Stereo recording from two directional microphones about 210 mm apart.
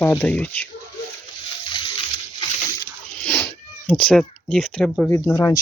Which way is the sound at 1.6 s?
25° left (ahead or behind).